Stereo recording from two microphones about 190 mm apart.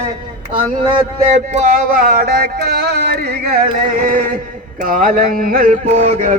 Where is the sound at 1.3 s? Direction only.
40° right (ahead or behind).